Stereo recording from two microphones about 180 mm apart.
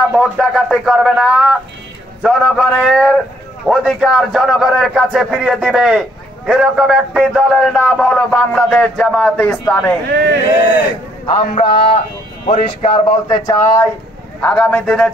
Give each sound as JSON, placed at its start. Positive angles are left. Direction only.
{"t": 0.1, "sound": "a man's voice", "side_deg": 0}
{"t": 10.0, "sound": "speech", "side_deg": -65}
{"t": 11.2, "sound": "speech", "side_deg": 30}
{"t": 14.4, "sound": "a man's voice", "side_deg": 5}